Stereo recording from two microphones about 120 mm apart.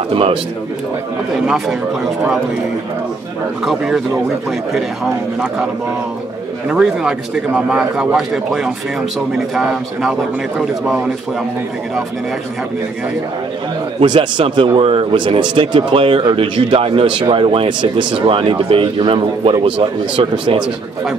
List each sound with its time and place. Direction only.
0.1 s speech: 50° right (ahead or behind)
1.3 s a man's voice: centre (ahead or behind)
3.6 s a man's voice: 5° right (ahead or behind)
6.7 s a man's voice: 5° right (ahead or behind)
13.9 s speech: 40° right (ahead or behind)